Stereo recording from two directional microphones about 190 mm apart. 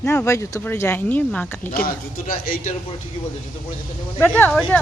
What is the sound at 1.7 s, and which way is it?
Speech, 50° left (ahead or behind).